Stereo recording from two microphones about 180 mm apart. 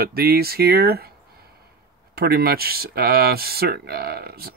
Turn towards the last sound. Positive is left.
turn(degrees=-60)  # may be behind; listen again after turning